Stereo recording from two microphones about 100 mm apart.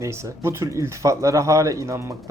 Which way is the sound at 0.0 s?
30° right (ahead or behind).